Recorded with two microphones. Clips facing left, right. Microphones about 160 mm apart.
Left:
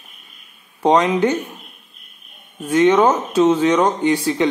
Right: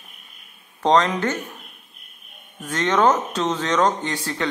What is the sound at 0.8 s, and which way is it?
Speech, 10° left (ahead or behind).